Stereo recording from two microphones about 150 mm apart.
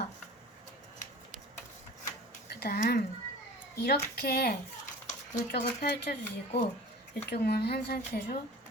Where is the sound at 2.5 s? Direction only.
90° left.